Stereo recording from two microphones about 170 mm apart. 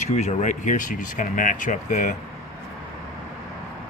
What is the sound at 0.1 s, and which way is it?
Speech, 40° left (ahead or behind).